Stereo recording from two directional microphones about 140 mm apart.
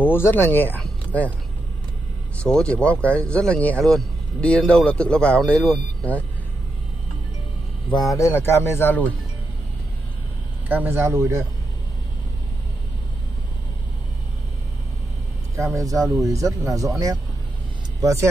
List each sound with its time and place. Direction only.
0.0 s speech: 15° left (ahead or behind)
2.3 s speech: 5° left (ahead or behind)
8.2 s speech: 15° left (ahead or behind)
10.7 s speech: 15° right (ahead or behind)
15.5 s speech: 20° right (ahead or behind)
18.0 s speech: 20° right (ahead or behind)